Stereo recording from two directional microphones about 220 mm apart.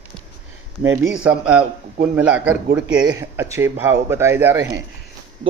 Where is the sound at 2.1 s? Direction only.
5° right (ahead or behind).